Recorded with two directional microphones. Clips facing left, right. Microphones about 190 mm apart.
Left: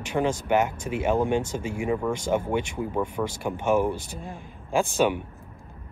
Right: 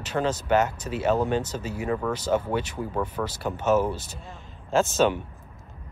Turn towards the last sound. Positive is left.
turn(degrees=15)  # may be behind; listen again after turning